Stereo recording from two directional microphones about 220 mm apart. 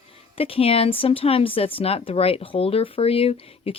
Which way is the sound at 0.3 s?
25° left (ahead or behind).